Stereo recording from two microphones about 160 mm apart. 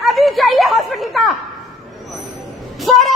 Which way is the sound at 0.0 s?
Centre (ahead or behind).